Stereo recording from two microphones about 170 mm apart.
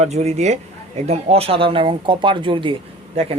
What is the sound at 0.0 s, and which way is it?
Speech, 40° right (ahead or behind).